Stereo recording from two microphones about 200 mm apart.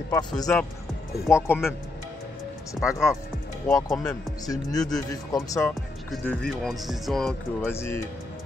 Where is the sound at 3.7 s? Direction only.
15° left (ahead or behind).